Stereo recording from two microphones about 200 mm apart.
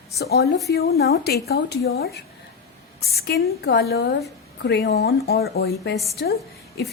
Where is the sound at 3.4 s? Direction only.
55° left (ahead or behind).